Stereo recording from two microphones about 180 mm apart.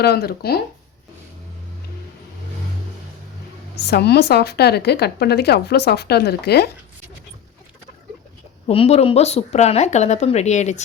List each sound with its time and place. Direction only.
0.0 s speech: 60° left (ahead or behind)
3.8 s speech: 65° left (ahead or behind)
8.6 s a woman's voice: 35° left (ahead or behind)